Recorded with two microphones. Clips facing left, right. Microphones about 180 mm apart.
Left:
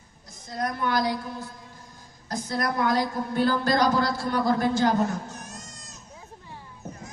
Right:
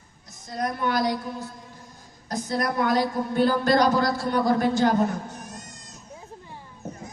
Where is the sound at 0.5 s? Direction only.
20° right (ahead or behind).